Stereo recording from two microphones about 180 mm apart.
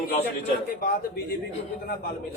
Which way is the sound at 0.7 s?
55° left (ahead or behind).